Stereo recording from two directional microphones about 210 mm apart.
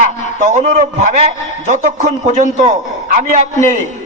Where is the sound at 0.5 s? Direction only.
35° right (ahead or behind).